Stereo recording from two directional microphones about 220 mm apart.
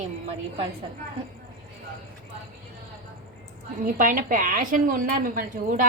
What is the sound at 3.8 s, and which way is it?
A woman's voice, 35° right (ahead or behind).